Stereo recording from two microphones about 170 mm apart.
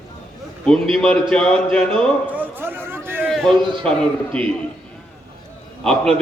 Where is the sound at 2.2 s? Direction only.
10° right (ahead or behind).